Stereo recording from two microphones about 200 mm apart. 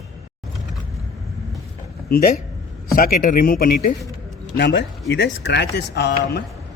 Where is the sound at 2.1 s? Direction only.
45° left (ahead or behind).